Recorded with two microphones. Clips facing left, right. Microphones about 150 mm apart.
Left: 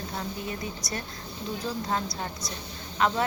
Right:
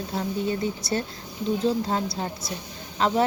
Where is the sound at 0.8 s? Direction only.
30° right (ahead or behind).